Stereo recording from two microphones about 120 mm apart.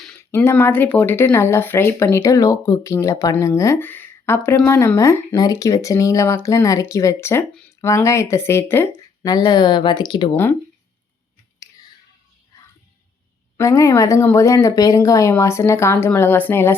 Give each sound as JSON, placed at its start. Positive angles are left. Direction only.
{"t": 0.2, "sound": "speech", "side_deg": 20}
{"t": 9.2, "sound": "speech", "side_deg": 35}
{"t": 13.6, "sound": "speech", "side_deg": 25}